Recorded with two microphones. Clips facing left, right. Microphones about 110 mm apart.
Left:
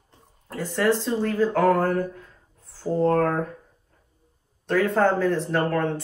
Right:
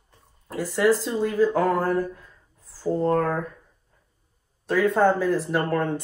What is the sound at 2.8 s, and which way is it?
Speech, 5° right (ahead or behind).